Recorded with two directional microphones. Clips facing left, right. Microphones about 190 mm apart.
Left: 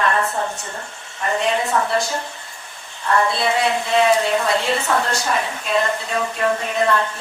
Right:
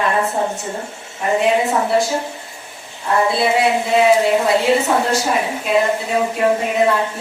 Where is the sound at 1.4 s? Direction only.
10° right (ahead or behind).